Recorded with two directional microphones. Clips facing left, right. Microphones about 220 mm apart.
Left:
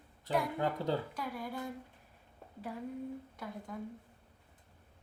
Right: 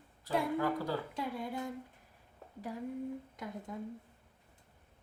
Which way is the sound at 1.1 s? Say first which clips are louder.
Right 2 dB; 25° right (ahead or behind).